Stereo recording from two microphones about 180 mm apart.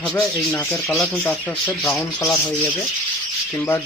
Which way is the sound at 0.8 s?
Centre (ahead or behind).